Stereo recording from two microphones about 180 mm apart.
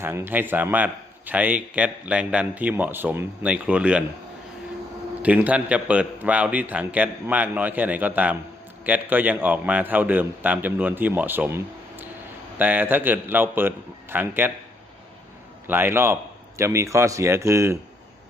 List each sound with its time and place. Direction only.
0.0 s a man's voice: 15° right (ahead or behind)
5.2 s a man's voice: 10° right (ahead or behind)
15.6 s a man's voice: 10° right (ahead or behind)